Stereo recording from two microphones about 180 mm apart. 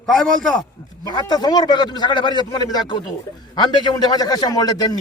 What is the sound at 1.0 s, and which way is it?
A man's voice, 25° left (ahead or behind).